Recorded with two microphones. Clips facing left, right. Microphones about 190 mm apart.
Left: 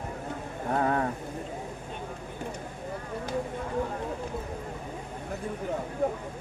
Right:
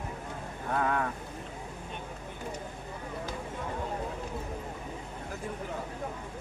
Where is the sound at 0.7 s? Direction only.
35° left (ahead or behind).